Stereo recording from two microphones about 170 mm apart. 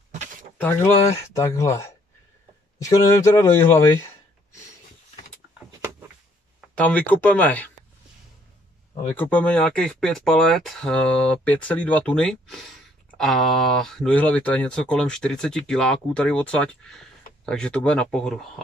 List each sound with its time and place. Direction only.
0.1 s a sound: 45° right (ahead or behind)
1.1 s speech: 20° left (ahead or behind)
6.7 s speech: 10° left (ahead or behind)
9.1 s speech: 10° left (ahead or behind)